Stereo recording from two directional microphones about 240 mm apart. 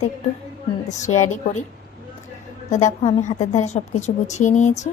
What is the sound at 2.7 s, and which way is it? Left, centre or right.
A woman's voice, left.